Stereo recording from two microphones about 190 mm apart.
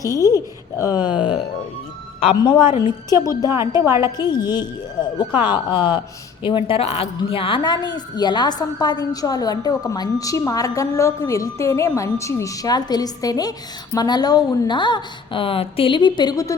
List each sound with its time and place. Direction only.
0.0 s speech: 20° left (ahead or behind)
1.1 s speech: 5° right (ahead or behind)
2.2 s a woman's voice: 25° left (ahead or behind)
3.8 s a woman's voice: 15° right (ahead or behind)
4.2 s a woman's voice: 20° left (ahead or behind)